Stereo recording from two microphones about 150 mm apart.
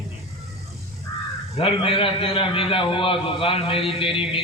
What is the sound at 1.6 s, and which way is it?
A man's voice, 40° left (ahead or behind).